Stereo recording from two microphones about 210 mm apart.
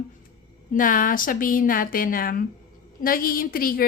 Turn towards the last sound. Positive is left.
turn(degrees=45)  # may be behind; listen again after turning